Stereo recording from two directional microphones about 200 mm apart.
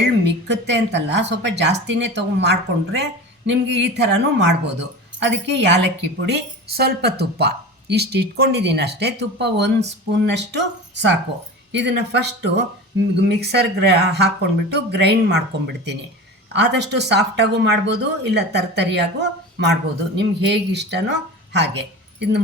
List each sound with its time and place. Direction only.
0.0 s speech: 60° right (ahead or behind)